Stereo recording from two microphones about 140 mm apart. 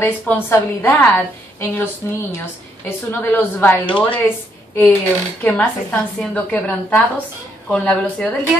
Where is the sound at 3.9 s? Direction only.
35° left (ahead or behind).